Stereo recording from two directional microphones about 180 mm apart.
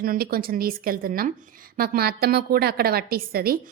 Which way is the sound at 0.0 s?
55° right (ahead or behind).